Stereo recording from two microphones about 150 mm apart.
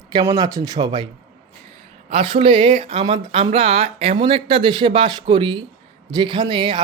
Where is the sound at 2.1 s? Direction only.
40° right (ahead or behind).